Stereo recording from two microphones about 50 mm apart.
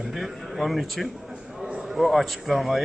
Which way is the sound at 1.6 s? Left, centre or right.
Centre.